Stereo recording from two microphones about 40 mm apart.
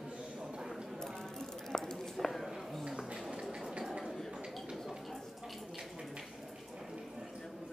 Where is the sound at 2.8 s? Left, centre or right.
Centre.